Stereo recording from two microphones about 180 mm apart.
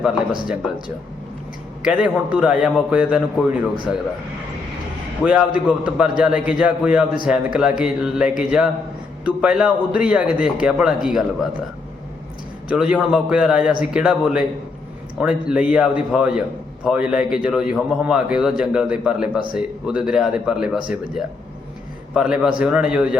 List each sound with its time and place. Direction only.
1.8 s a man's voice: 5° right (ahead or behind)
5.2 s a man's voice: 5° right (ahead or behind)
12.6 s a man's voice: 5° right (ahead or behind)
22.1 s a man's voice: 5° right (ahead or behind)